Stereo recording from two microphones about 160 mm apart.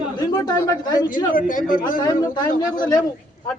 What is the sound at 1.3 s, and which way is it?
Speech, 60° left (ahead or behind).